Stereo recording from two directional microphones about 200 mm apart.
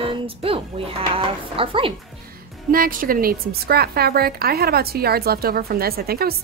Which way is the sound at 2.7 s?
45° right (ahead or behind).